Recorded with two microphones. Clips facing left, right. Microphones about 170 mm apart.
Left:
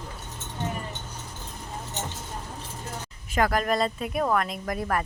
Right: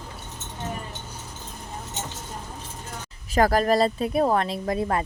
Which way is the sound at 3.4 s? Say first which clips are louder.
Right 4 dB; 35° right (ahead or behind).